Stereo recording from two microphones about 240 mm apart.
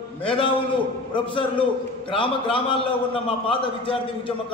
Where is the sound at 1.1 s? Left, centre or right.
Left.